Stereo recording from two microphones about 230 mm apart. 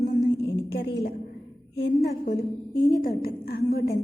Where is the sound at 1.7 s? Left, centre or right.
Left.